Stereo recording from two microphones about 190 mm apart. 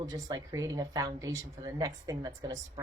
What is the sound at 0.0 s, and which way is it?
A woman's voice, 20° right (ahead or behind).